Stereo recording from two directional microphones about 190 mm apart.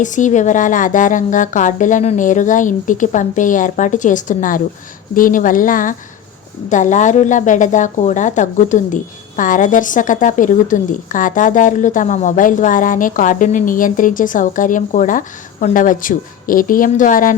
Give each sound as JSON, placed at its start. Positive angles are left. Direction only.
{"t": 0.0, "sound": "a woman's voice", "side_deg": 40}